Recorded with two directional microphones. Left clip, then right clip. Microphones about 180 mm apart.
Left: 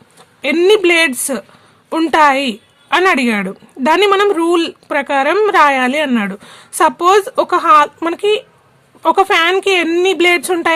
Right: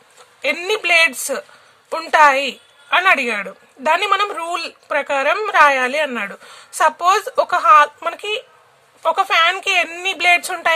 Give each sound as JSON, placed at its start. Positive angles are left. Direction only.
{"t": 0.4, "sound": "a woman's voice", "side_deg": 20}